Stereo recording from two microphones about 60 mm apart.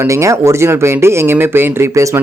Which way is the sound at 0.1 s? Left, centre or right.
Right.